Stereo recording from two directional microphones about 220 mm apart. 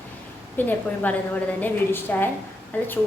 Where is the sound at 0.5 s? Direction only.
10° left (ahead or behind).